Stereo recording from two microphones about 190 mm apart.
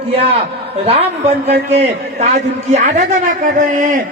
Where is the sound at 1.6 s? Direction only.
35° right (ahead or behind).